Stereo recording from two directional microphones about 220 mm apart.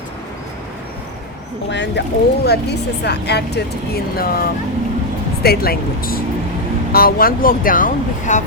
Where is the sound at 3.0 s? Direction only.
50° left (ahead or behind).